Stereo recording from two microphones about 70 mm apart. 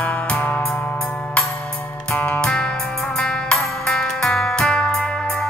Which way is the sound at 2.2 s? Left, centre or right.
Centre.